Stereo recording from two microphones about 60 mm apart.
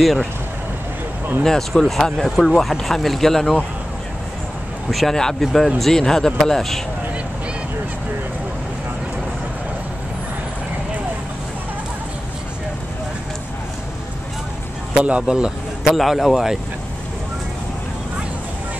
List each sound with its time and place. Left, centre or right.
0.0 s speech: centre
1.4 s speech: centre
4.9 s speech: centre
15.0 s speech: centre
15.8 s speech: centre